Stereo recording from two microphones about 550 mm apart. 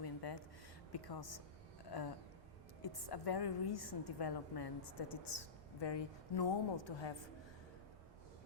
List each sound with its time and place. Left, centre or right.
0.0 s a sound: left
0.9 s a woman's voice: left
2.8 s a woman's voice: left